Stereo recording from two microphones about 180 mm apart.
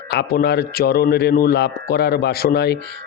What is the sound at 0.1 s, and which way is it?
A man's voice, 60° left (ahead or behind).